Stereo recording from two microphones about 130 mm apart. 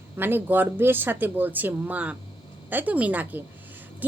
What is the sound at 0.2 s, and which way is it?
A woman's voice, 15° right (ahead or behind).